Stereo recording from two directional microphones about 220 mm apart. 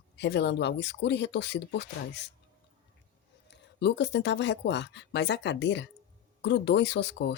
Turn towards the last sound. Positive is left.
turn(degrees=50)  # may be behind; listen again after turning